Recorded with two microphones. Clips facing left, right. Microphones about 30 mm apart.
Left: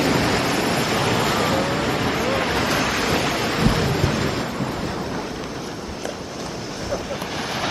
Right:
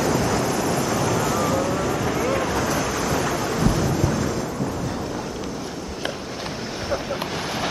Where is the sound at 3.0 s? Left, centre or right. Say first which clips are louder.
Left 2 dB; left.